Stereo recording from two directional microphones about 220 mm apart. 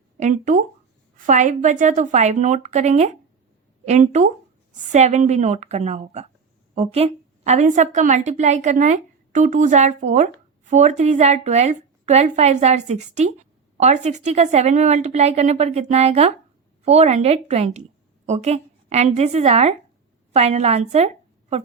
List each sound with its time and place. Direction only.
0.2 s a woman's voice: 35° right (ahead or behind)